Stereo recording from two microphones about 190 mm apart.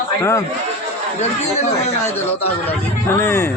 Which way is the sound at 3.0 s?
10° left (ahead or behind).